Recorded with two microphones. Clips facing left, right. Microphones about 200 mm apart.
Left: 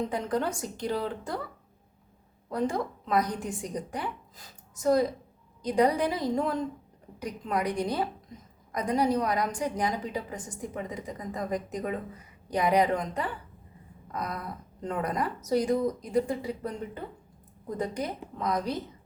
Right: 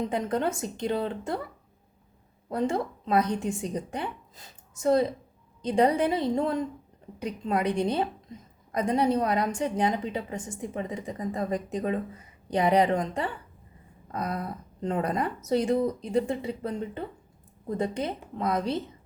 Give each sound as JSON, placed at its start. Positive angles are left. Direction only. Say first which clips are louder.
{"t": 0.1, "sound": "a woman's voice", "louder": "right 2 dB", "side_deg": -25}
{"t": 2.5, "sound": "a woman's voice", "louder": "right 2 dB", "side_deg": -25}
{"t": 14.1, "sound": "a sound", "louder": "right 3 dB", "side_deg": -30}
{"t": 14.8, "sound": "a woman's voice", "louder": "right 3 dB", "side_deg": -25}